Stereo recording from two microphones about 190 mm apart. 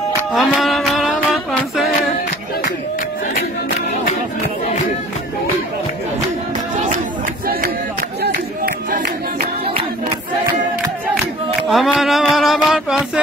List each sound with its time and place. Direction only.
0.3 s music: centre (ahead or behind)
8.2 s a sound: 50° right (ahead or behind)
11.7 s speech: centre (ahead or behind)